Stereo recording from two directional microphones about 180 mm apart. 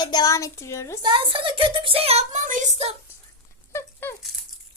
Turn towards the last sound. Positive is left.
turn(degrees=10)  # may be behind; listen again after turning